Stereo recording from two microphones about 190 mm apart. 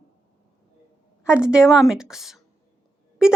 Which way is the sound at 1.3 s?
5° right (ahead or behind).